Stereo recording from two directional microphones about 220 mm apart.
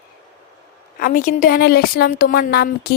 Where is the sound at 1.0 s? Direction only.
40° left (ahead or behind).